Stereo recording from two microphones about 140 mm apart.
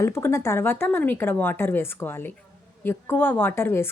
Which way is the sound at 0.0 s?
20° left (ahead or behind).